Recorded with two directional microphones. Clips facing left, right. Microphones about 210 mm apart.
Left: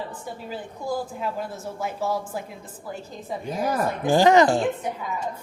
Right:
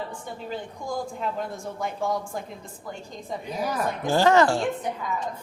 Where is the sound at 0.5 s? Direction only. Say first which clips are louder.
Left 2 dB; 5° left (ahead or behind).